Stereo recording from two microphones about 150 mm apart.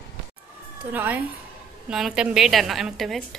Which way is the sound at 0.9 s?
10° right (ahead or behind).